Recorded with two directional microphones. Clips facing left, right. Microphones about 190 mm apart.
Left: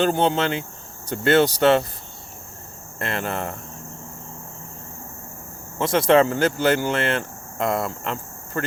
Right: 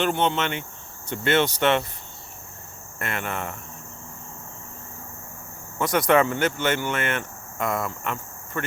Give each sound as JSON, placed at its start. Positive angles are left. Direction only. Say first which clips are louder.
{"t": 0.0, "sound": "speech", "louder": "left 4 dB", "side_deg": 35}
{"t": 3.0, "sound": "speech", "louder": "left 3 dB", "side_deg": 35}
{"t": 5.8, "sound": "speech", "louder": "left 3 dB", "side_deg": 25}